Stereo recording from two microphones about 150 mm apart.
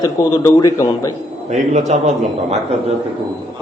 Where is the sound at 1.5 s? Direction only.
55° right (ahead or behind).